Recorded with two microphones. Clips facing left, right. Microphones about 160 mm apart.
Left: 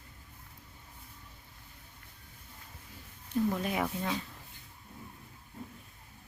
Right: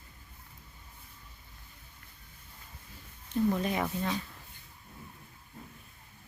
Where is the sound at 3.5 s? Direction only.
5° left (ahead or behind).